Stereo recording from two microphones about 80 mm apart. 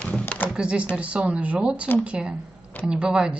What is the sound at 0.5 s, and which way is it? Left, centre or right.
Speech, centre.